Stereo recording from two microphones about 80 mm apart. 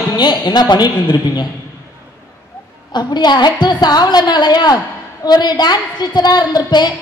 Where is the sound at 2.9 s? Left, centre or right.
Left.